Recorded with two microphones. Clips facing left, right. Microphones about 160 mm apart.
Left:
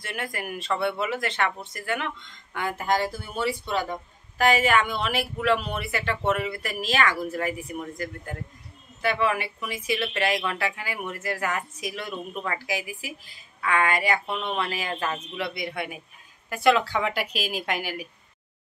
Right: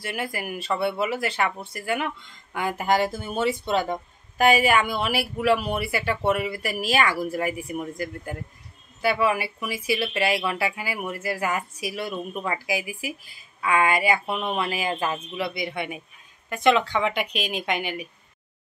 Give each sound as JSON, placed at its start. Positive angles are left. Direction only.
{"t": 0.0, "sound": "speech", "side_deg": -5}
{"t": 15.3, "sound": "speech", "side_deg": 0}